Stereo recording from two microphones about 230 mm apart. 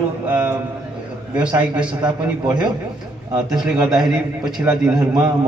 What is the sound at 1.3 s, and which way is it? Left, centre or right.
Speech, centre.